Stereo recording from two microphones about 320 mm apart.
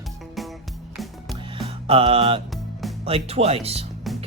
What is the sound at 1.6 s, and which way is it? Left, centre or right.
Music, centre.